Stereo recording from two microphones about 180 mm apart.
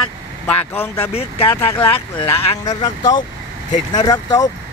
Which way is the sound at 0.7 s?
10° left (ahead or behind).